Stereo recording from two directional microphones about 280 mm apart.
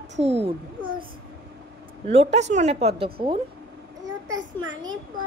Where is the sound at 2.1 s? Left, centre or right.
Right.